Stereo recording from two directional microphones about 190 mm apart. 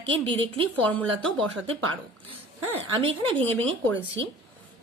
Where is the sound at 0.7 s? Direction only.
5° left (ahead or behind).